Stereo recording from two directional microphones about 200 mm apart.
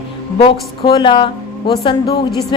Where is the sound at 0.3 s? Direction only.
25° left (ahead or behind).